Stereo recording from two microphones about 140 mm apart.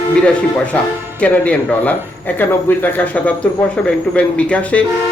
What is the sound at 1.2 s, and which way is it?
Speech, 10° left (ahead or behind).